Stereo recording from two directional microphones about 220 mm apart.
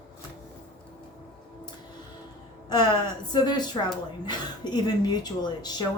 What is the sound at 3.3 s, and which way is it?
Speech, 20° left (ahead or behind).